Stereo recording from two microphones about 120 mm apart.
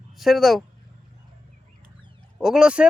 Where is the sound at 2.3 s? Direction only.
5° right (ahead or behind).